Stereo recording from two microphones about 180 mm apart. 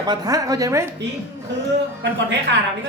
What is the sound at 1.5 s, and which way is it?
Speech, 75° right (ahead or behind).